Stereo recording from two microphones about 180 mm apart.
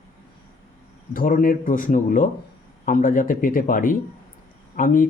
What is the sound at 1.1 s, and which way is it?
A man's voice, 50° left (ahead or behind).